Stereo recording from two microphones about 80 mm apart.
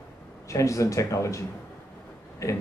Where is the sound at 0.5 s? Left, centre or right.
Left.